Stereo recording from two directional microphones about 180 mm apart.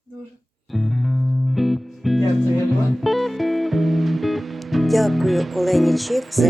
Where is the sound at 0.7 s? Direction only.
Centre (ahead or behind).